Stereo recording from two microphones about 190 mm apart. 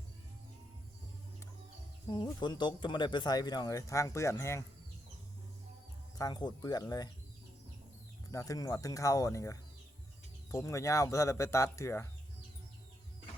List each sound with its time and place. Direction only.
2.0 s speech: 25° left (ahead or behind)
6.1 s speech: 20° left (ahead or behind)
8.3 s speech: 15° left (ahead or behind)